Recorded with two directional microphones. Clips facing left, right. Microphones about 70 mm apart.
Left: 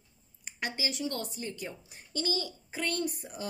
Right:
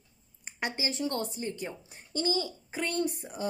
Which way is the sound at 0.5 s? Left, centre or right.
Right.